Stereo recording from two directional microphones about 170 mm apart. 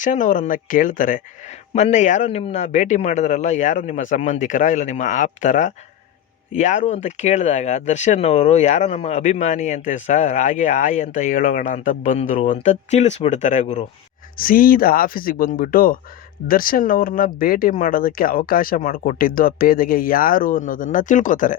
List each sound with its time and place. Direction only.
0.0 s speech: 50° left (ahead or behind)
14.3 s speech: 55° left (ahead or behind)